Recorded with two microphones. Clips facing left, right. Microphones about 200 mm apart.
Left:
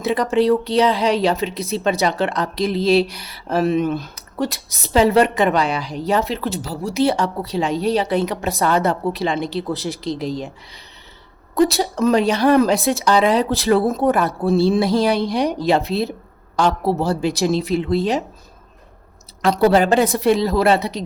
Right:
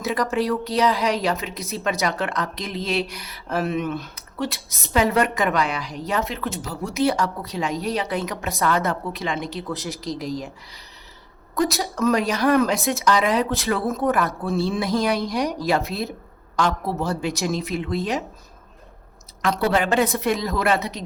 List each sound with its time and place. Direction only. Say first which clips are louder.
0.0 s speech: left 6 dB; 25° left (ahead or behind)
19.4 s speech: left 6 dB; 35° left (ahead or behind)